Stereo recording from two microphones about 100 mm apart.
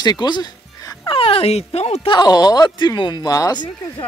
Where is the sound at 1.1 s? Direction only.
65° left (ahead or behind); by 2.1 s 90° left.